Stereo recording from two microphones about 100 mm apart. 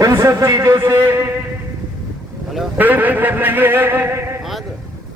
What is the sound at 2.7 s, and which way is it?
A man's voice, 20° right (ahead or behind).